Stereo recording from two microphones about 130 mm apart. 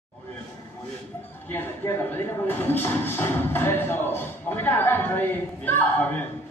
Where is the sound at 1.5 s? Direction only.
15° left (ahead or behind).